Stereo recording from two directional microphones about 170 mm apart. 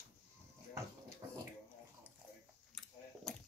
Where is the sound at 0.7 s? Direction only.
20° right (ahead or behind).